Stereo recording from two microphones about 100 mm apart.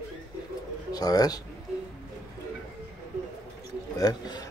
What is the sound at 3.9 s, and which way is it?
Speech, 45° left (ahead or behind).